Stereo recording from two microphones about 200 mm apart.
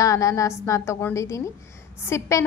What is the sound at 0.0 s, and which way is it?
A woman's voice, 15° left (ahead or behind).